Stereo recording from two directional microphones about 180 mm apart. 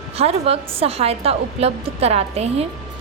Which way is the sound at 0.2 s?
35° right (ahead or behind).